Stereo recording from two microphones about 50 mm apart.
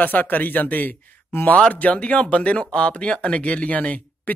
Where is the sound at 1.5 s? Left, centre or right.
Left.